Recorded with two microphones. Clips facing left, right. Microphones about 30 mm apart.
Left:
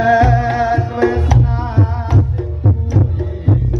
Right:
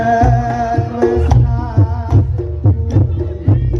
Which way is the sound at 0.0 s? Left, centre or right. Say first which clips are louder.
Left 1 dB; left.